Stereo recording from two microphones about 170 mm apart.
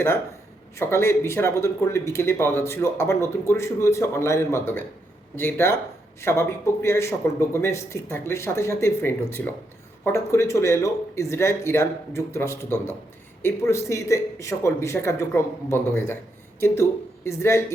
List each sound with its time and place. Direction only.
0.8 s speech: 15° left (ahead or behind)